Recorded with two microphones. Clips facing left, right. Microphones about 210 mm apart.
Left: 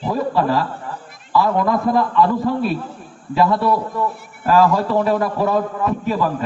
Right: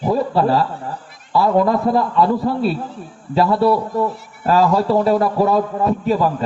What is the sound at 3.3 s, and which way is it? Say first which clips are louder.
A man's voice: right 2 dB; 35° right (ahead or behind).